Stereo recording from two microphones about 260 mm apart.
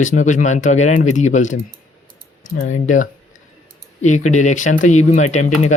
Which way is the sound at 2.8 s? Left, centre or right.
Left.